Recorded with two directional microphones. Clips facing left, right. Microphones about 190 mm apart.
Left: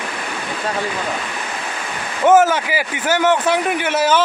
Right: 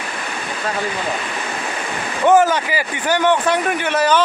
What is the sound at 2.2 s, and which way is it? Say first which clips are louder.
Speech: left 1 dB; 5° left (ahead or behind).